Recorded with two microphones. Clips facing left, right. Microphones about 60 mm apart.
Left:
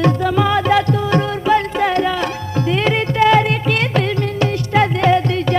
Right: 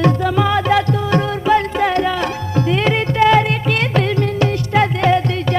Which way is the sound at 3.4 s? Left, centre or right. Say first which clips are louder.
Left 1 dB; centre.